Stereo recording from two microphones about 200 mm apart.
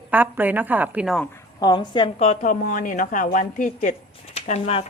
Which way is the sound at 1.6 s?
20° left (ahead or behind).